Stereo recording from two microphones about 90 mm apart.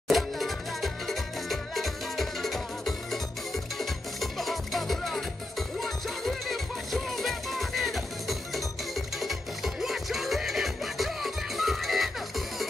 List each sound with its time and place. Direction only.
0.1 s music: centre (ahead or behind)